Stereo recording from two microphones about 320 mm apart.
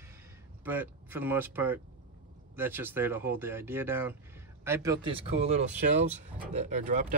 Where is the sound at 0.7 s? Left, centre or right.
Centre.